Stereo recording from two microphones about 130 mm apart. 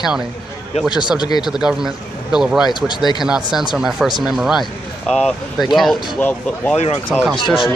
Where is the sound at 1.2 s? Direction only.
35° left (ahead or behind).